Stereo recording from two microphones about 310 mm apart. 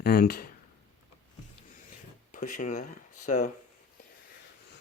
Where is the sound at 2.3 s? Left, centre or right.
Left.